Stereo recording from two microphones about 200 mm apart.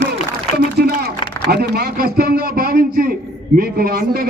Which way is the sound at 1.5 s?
55° right (ahead or behind).